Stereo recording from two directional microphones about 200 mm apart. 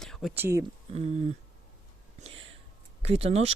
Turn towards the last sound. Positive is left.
turn(degrees=-30)  # may be behind; listen again after turning